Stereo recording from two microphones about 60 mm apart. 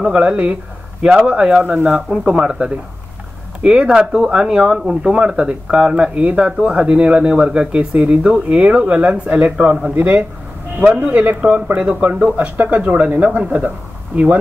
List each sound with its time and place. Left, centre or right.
0.0 s a man's voice: centre